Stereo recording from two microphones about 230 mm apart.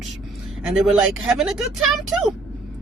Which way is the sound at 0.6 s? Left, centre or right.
Centre.